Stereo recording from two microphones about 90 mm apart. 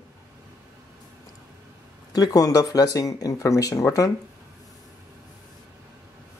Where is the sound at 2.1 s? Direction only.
45° left (ahead or behind).